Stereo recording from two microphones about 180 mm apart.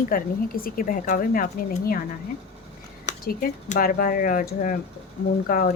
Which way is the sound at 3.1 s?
45° left (ahead or behind).